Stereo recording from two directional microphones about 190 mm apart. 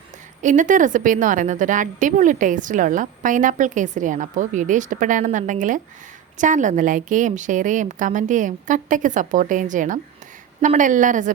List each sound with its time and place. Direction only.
0.4 s a woman's voice: 40° right (ahead or behind)